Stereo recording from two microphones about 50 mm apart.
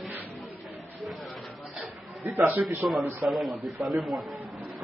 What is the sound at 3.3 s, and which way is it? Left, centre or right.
Speech, centre.